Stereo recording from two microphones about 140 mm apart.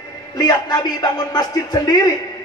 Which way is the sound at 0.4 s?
30° left (ahead or behind).